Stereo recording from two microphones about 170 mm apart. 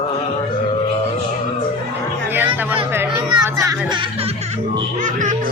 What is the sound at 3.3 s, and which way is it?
Children playing, 20° right (ahead or behind).